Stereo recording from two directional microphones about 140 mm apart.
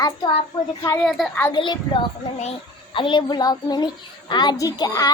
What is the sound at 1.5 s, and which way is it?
A woman's voice, 35° left (ahead or behind).